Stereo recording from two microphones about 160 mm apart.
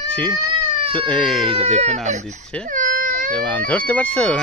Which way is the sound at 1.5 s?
40° right (ahead or behind).